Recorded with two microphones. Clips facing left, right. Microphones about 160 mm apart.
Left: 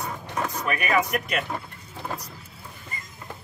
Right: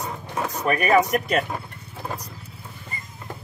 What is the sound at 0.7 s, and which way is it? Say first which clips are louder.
Speech: right 7 dB; 35° right (ahead or behind).